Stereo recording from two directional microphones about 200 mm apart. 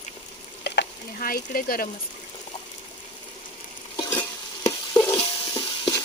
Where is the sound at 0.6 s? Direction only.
60° left (ahead or behind).